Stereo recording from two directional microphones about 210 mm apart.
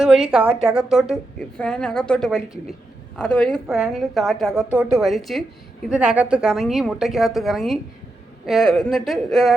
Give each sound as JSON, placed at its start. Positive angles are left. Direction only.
{"t": 0.3, "sound": "a woman's voice", "side_deg": -5}